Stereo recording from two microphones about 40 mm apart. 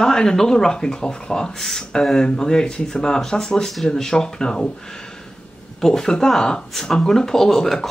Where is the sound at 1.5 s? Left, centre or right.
Centre.